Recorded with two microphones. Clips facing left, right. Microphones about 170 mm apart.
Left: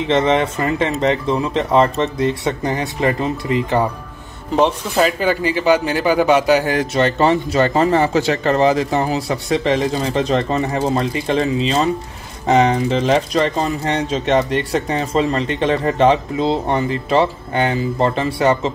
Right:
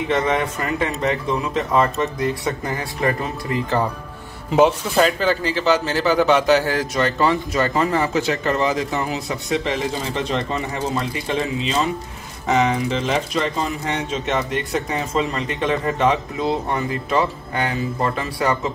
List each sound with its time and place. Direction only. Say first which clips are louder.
0.1 s speech: left 5 dB; 25° left (ahead or behind)
4.6 s speech: even; centre (ahead or behind); by 18.7 s 25° left (ahead or behind)